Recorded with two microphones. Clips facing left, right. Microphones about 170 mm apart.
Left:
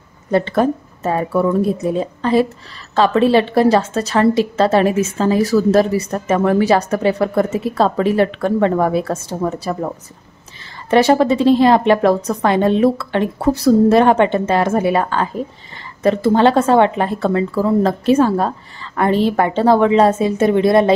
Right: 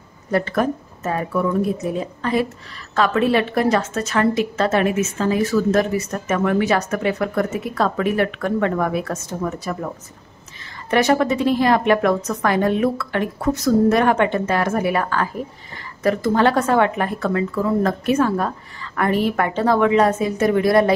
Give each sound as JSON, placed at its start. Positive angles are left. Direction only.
{"t": 0.3, "sound": "a woman's voice", "side_deg": 30}
{"t": 10.9, "sound": "speech", "side_deg": 30}